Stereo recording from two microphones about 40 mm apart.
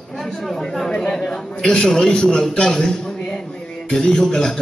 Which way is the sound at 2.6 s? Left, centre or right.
Centre.